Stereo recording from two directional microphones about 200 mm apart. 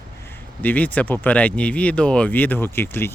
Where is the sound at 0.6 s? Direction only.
10° left (ahead or behind).